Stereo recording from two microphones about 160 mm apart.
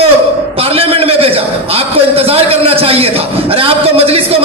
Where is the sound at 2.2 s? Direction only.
40° right (ahead or behind).